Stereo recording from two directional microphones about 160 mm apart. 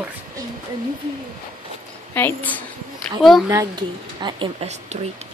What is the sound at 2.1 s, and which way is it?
Speech, 10° left (ahead or behind).